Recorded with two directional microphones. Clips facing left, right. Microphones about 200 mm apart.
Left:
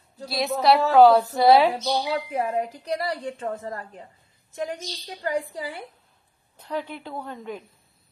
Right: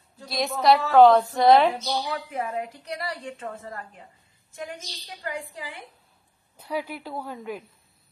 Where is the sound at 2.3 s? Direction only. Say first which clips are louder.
Left 4 dB; 35° left (ahead or behind).